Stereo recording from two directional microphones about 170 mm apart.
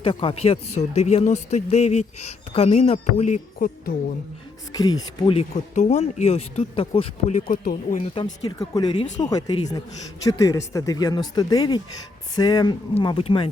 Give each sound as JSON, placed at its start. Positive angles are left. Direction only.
{"t": 0.0, "sound": "speech", "side_deg": 30}
{"t": 4.7, "sound": "speech", "side_deg": 20}
{"t": 5.7, "sound": "speech", "side_deg": 45}
{"t": 7.4, "sound": "speech", "side_deg": 55}
{"t": 8.0, "sound": "speech", "side_deg": 30}